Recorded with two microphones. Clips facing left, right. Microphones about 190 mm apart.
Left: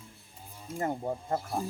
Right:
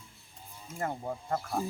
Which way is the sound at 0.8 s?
20° left (ahead or behind).